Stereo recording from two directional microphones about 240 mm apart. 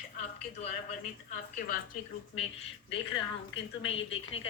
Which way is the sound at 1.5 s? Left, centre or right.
Left.